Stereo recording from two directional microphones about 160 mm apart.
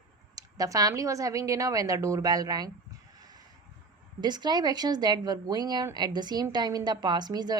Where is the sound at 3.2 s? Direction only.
25° right (ahead or behind).